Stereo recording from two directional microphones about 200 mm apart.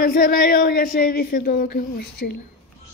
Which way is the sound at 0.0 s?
50° left (ahead or behind).